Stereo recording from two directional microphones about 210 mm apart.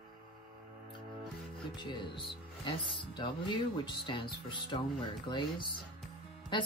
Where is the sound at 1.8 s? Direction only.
20° left (ahead or behind).